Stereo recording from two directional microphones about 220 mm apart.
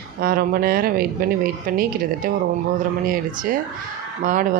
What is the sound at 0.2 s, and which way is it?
Speech, 40° right (ahead or behind).